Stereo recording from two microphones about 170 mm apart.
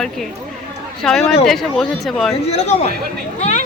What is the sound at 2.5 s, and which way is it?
Speech, 40° left (ahead or behind).